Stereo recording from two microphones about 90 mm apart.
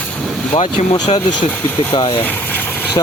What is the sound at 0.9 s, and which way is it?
Speech, 50° left (ahead or behind).